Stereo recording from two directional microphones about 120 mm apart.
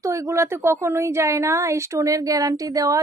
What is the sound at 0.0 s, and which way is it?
Speech, 25° right (ahead or behind).